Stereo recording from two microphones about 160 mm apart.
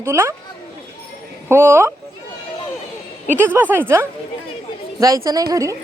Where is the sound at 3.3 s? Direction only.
10° right (ahead or behind).